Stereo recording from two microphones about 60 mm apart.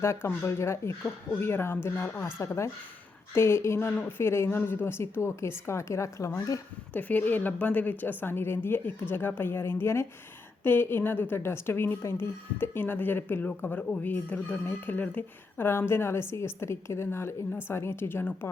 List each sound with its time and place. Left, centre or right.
0.0 s a woman's voice: left
2.4 s a woman's voice: left
6.9 s a woman's voice: left
10.6 s a woman's voice: left
11.3 s a woman's voice: left